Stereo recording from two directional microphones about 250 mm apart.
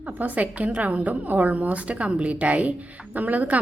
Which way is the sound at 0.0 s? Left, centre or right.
Centre.